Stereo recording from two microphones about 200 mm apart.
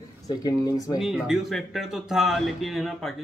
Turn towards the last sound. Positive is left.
turn(degrees=0)  # may be behind; listen again after turning